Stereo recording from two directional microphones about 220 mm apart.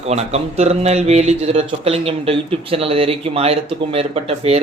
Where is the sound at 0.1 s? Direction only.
30° right (ahead or behind).